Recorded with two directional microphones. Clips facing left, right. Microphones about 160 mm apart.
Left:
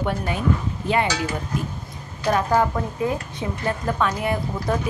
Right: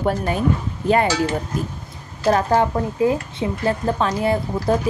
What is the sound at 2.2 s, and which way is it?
Speech, 35° right (ahead or behind).